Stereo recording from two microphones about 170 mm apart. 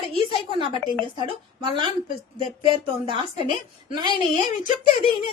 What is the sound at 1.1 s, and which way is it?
Speech, 25° right (ahead or behind).